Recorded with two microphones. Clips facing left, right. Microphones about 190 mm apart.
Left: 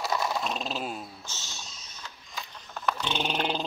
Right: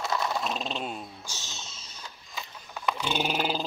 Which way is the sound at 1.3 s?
15° right (ahead or behind).